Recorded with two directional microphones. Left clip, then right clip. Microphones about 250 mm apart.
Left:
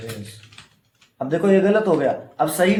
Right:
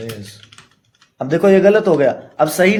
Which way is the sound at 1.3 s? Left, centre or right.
Right.